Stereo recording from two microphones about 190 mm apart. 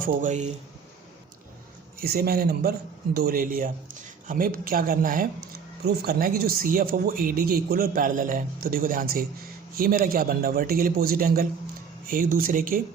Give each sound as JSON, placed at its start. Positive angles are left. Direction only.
{"t": 0.0, "sound": "speech", "side_deg": -40}
{"t": 2.0, "sound": "speech", "side_deg": -55}